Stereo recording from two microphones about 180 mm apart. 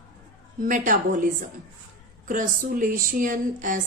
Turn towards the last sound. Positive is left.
turn(degrees=-45)  # may be behind; listen again after turning